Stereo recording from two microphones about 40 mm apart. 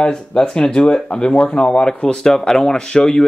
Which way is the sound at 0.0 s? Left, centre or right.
Centre.